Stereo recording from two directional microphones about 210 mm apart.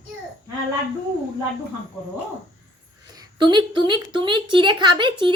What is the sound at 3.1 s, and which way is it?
A woman's voice, 20° right (ahead or behind).